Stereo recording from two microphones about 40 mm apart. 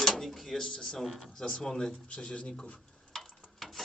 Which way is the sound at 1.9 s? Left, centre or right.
Left.